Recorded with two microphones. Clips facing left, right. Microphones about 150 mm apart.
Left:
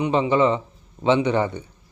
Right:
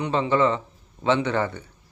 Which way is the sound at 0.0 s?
15° left (ahead or behind).